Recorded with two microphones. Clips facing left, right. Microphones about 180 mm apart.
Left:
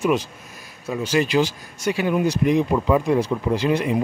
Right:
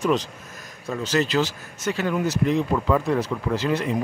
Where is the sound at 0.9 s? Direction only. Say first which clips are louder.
Left 2 dB; 10° left (ahead or behind).